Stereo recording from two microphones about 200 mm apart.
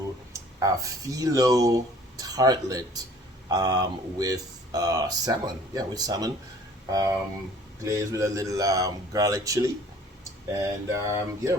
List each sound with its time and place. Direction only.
0.6 s speech: 15° right (ahead or behind)